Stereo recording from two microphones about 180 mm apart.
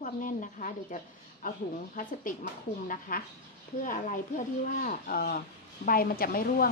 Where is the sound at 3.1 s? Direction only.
55° left (ahead or behind).